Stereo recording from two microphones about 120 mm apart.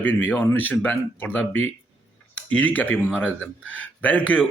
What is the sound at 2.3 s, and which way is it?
A man's voice, 10° left (ahead or behind).